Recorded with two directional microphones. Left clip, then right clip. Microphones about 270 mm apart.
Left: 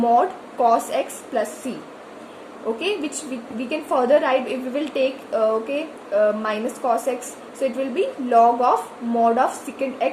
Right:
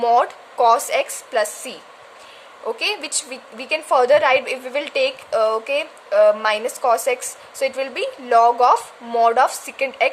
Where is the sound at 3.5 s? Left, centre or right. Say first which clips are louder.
Right 5 dB; right.